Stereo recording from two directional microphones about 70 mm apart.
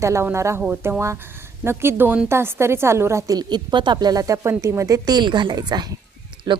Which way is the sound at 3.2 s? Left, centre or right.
Right.